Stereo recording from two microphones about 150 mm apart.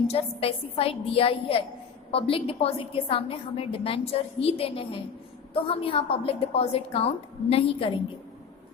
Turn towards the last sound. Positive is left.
turn(degrees=35)  # may be behind; listen again after turning